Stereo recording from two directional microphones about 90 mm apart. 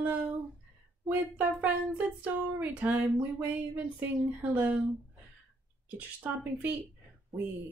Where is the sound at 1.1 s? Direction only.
20° right (ahead or behind).